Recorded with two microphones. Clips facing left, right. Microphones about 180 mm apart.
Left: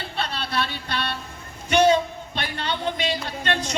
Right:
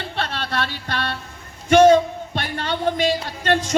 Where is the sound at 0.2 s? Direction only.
50° right (ahead or behind).